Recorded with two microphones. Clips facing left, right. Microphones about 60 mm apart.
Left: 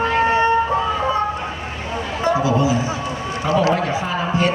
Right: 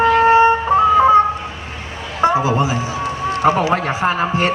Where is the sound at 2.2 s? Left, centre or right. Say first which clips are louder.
Right 3 dB; right.